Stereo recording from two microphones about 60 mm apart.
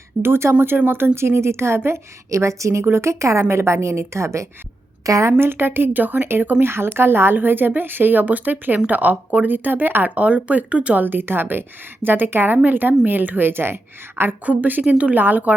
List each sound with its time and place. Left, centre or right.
0.2 s a woman's voice: right
5.4 s a woman's voice: right; by 11.0 s centre
11.0 s a woman's voice: right
14.4 s speech: right